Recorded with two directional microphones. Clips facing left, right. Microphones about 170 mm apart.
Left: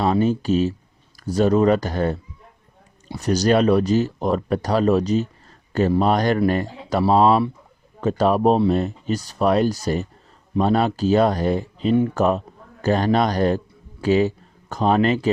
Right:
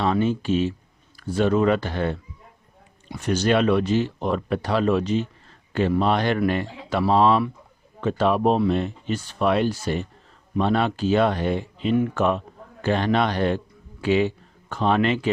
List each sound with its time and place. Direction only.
0.0 s speech: 40° left (ahead or behind)